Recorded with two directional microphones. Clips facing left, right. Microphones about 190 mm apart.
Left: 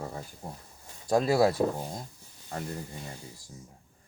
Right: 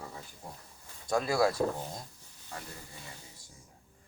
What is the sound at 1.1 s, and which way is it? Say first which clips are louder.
Speech: left 4 dB; 25° left (ahead or behind).